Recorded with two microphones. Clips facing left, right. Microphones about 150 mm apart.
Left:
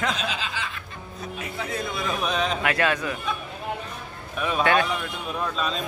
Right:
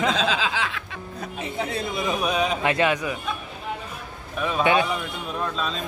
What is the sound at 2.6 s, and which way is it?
Speech, 20° right (ahead or behind).